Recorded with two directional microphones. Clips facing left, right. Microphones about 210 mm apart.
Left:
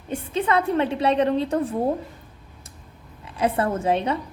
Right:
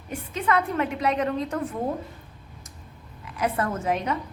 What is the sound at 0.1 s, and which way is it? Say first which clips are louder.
A woman's voice: left 3 dB; 30° left (ahead or behind).